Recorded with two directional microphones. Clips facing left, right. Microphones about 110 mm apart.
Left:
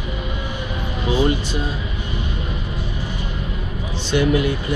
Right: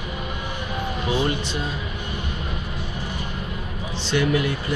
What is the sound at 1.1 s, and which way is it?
Music, 5° left (ahead or behind).